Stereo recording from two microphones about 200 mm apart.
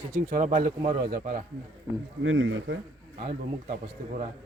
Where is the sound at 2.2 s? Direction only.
75° right (ahead or behind).